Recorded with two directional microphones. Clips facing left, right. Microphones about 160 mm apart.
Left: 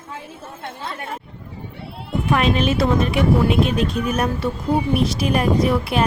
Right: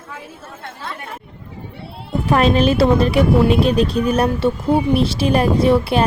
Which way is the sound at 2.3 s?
35° right (ahead or behind).